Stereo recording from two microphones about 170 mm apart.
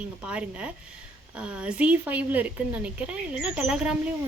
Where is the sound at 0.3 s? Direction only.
5° right (ahead or behind).